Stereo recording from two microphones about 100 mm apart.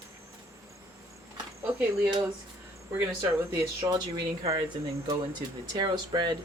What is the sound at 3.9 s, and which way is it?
Speech, 40° right (ahead or behind).